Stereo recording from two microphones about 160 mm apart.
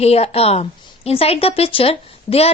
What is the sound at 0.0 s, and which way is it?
A woman's voice, 40° left (ahead or behind).